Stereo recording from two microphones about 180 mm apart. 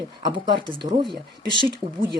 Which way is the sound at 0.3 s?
25° right (ahead or behind).